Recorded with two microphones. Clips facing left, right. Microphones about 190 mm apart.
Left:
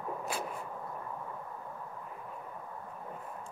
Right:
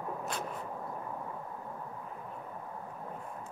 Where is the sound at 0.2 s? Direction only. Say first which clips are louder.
Left 1 dB; 5° left (ahead or behind).